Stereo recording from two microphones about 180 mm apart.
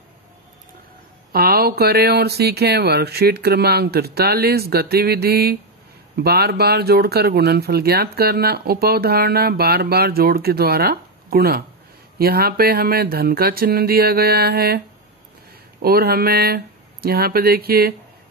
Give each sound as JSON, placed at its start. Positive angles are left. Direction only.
{"t": 1.3, "sound": "speech", "side_deg": -55}
{"t": 15.8, "sound": "speech", "side_deg": -60}